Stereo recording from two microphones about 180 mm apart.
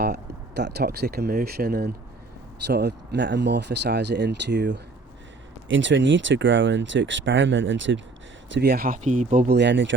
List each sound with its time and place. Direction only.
0.0 s speech: 65° right (ahead or behind)
5.6 s speech: 90° right
8.5 s speech: 60° right (ahead or behind); by 9.5 s 45° right (ahead or behind)
9.5 s speech: 75° right (ahead or behind)